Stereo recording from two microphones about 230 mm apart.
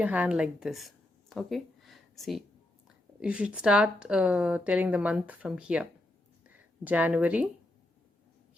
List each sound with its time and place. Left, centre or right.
0.0 s a woman's voice: centre